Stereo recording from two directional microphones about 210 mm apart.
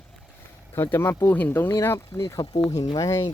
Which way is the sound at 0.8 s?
10° left (ahead or behind).